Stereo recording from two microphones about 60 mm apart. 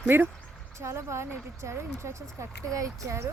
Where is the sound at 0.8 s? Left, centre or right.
Right.